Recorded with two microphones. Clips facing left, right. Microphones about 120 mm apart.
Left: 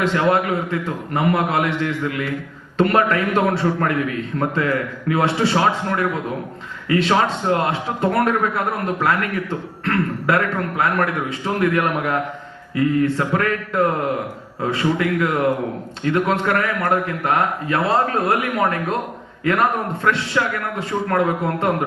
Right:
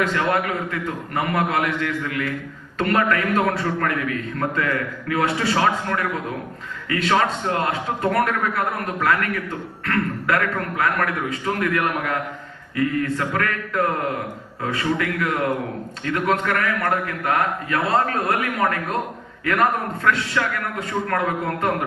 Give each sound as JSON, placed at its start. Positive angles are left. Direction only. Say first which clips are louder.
{"t": 0.0, "sound": "a man's voice", "louder": "left 3 dB", "side_deg": 25}